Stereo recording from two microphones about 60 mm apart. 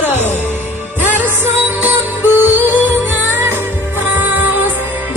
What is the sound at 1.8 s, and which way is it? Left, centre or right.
Music, right.